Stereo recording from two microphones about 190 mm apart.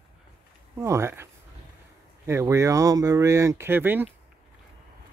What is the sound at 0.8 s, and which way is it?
Speech, 15° right (ahead or behind).